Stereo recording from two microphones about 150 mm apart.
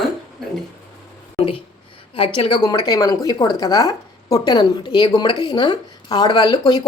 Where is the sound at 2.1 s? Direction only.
35° left (ahead or behind).